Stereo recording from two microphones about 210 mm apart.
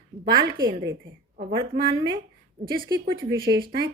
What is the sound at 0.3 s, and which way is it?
Speech, 20° right (ahead or behind).